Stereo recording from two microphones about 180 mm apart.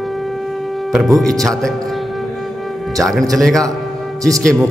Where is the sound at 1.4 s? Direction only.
5° left (ahead or behind).